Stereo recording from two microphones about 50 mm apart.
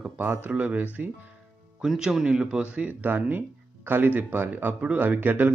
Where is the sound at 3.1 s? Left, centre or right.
Right.